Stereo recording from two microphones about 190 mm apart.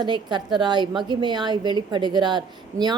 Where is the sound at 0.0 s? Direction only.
25° right (ahead or behind).